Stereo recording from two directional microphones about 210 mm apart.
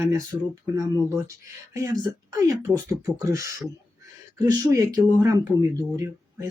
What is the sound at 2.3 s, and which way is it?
Speech, 15° right (ahead or behind).